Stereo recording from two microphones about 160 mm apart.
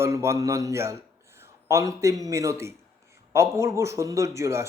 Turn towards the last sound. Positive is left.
turn(degrees=-15)  # may be behind; listen again after turning